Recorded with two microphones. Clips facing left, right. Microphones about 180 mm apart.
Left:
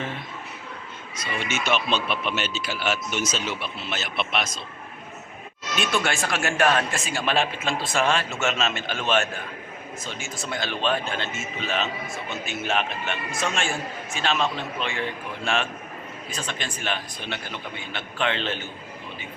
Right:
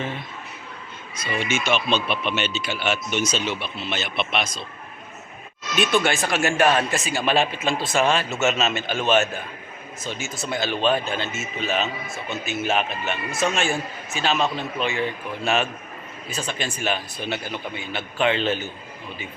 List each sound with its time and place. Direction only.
1.3 s speech: 30° right (ahead or behind)
1.5 s a man's voice: centre (ahead or behind)
5.7 s a man's voice: centre (ahead or behind)